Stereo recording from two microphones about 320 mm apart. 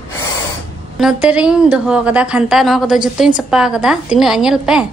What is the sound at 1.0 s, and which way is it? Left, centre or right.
A woman's voice, centre.